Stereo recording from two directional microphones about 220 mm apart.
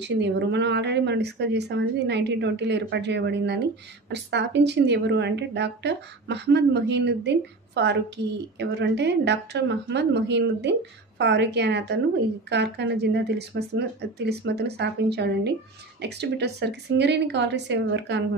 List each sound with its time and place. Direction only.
0.0 s a woman's voice: 55° right (ahead or behind)